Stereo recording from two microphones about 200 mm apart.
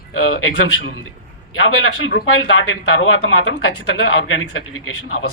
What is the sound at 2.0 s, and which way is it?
A man's voice, 75° left (ahead or behind).